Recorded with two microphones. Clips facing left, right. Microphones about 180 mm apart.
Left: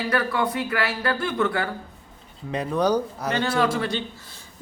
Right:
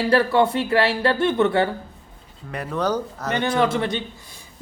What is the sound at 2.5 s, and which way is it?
Speech, 15° left (ahead or behind).